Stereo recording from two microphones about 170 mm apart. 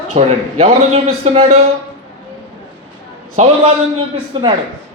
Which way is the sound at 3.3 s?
35° right (ahead or behind).